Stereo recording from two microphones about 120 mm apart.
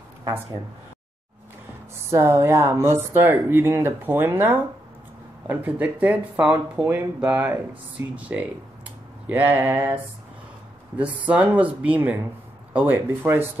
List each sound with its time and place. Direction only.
2.0 s speech: 25° right (ahead or behind)
11.0 s speech: 10° right (ahead or behind)